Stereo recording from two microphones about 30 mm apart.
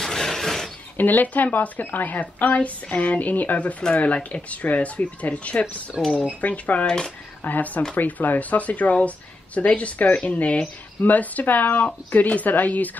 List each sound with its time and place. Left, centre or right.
0.0 s a sound: centre
0.9 s a woman's voice: left
6.0 s speech: centre
6.4 s a woman's voice: left
7.4 s a woman's voice: left
11.0 s speech: left